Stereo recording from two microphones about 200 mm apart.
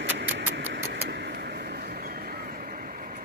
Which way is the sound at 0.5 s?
55° right (ahead or behind).